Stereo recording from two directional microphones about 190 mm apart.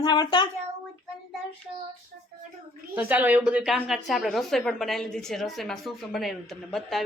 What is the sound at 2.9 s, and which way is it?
Speech, 10° right (ahead or behind).